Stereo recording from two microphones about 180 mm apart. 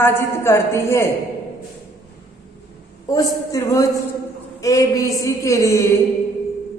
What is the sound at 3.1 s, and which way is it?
A woman's voice, 15° left (ahead or behind).